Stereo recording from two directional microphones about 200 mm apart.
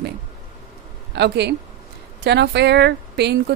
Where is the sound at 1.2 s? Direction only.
55° right (ahead or behind).